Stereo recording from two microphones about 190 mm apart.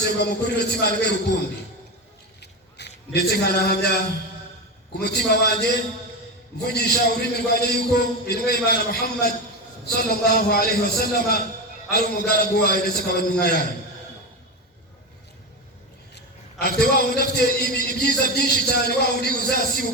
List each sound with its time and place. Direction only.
0.0 s a man's voice: 60° left (ahead or behind)
2.4 s a sound: 60° left (ahead or behind)
4.9 s a man's voice: 60° left (ahead or behind)
6.6 s a man's voice: 55° left (ahead or behind)
16.1 s a man's voice: 55° left (ahead or behind)